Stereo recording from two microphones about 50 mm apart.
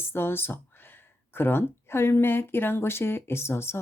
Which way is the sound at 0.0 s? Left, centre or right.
Left.